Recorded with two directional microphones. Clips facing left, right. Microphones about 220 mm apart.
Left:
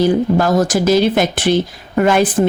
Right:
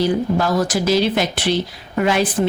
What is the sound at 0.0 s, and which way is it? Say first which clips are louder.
Speech: left 4 dB; 45° left (ahead or behind).